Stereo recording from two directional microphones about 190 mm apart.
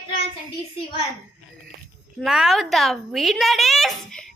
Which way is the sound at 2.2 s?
Centre (ahead or behind).